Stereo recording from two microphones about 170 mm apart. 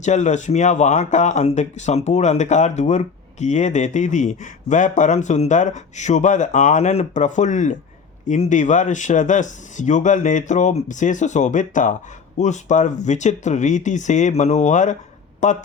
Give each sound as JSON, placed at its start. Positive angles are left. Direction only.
{"t": 0.0, "sound": "speech", "side_deg": 45}